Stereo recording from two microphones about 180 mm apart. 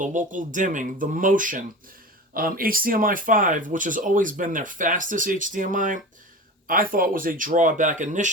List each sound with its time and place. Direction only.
0.0 s speech: 45° right (ahead or behind)